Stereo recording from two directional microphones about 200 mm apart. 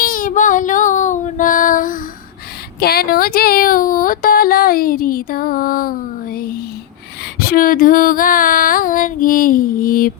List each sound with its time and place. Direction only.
0.0 s child singing: 45° left (ahead or behind)
2.8 s speech: 50° left (ahead or behind)